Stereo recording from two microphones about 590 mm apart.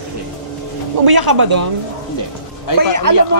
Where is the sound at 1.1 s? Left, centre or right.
Right.